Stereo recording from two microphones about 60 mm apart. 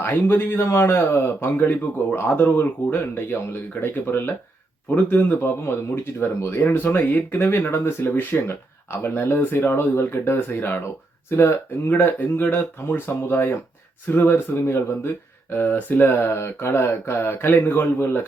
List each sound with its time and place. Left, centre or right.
0.0 s speech: left
8.1 s speech: left